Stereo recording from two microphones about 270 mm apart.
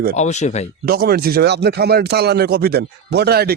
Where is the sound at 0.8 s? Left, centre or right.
Right.